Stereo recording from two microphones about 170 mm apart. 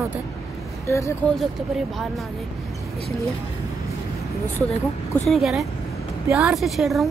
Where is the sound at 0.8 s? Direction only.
15° left (ahead or behind).